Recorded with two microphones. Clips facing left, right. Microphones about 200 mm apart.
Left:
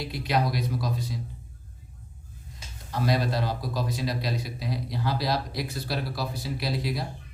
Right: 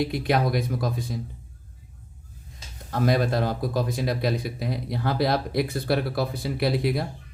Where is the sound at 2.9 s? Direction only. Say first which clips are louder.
Right 4 dB; 50° right (ahead or behind).